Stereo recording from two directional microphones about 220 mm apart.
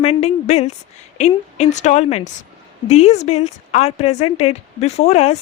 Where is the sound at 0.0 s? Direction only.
30° left (ahead or behind).